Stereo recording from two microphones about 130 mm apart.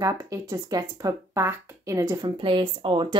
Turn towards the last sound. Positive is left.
turn(degrees=-40)  # may be behind; listen again after turning